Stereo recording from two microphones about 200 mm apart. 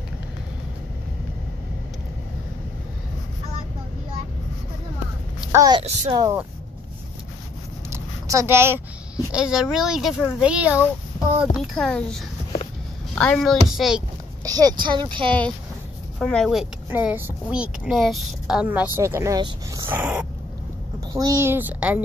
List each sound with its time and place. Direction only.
5.5 s a child's voice: 20° right (ahead or behind)
7.9 s a woman's voice: 15° right (ahead or behind)
14.4 s speech: 20° right (ahead or behind)
16.2 s speech: centre (ahead or behind); by 19.9 s 20° right (ahead or behind)
19.9 s a woman's voice: 10° right (ahead or behind)